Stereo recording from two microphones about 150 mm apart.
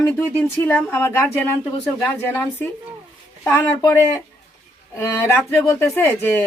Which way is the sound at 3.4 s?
15° left (ahead or behind).